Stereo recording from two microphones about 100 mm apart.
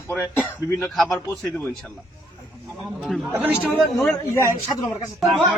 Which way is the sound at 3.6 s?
5° left (ahead or behind).